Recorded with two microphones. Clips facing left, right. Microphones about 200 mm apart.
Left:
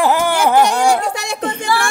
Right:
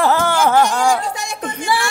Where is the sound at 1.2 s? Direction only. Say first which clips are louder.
Left 4 dB; 70° left (ahead or behind).